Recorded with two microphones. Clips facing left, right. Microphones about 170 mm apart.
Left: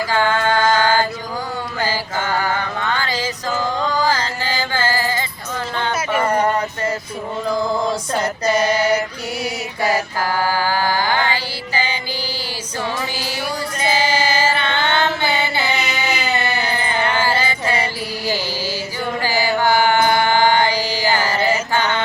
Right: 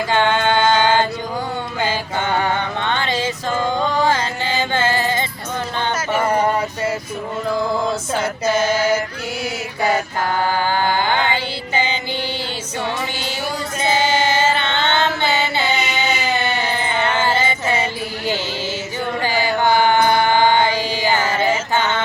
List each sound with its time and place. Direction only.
0.1 s music: 25° right (ahead or behind)
1.8 s mantra: 25° right (ahead or behind)
3.8 s music: 25° right (ahead or behind)
6.1 s a sound: 5° right (ahead or behind)
8.1 s female singing: 5° right (ahead or behind)
10.7 s music: 20° right (ahead or behind)
14.1 s music: 25° right (ahead or behind)
14.7 s a sound: 10° left (ahead or behind)
17.2 s music: 25° right (ahead or behind)
19.6 s mantra: 20° right (ahead or behind)